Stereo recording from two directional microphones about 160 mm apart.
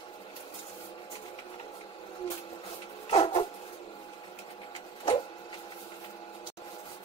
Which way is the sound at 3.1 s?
35° left (ahead or behind).